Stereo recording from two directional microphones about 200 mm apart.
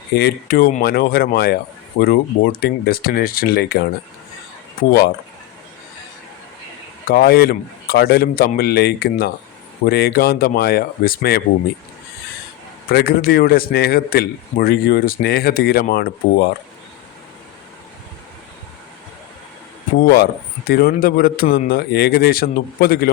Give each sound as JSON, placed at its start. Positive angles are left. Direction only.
{"t": 0.1, "sound": "speech", "side_deg": 50}
{"t": 7.1, "sound": "speech", "side_deg": 50}
{"t": 12.9, "sound": "speech", "side_deg": 50}
{"t": 20.0, "sound": "speech", "side_deg": 50}